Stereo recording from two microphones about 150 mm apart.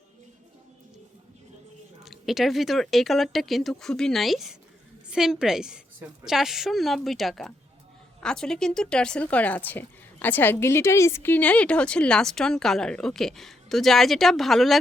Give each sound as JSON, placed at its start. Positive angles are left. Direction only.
{"t": 2.0, "sound": "speech", "side_deg": 0}